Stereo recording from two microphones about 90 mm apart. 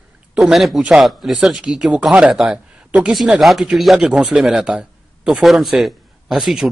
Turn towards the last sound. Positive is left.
turn(degrees=-5)  # may be behind; listen again after turning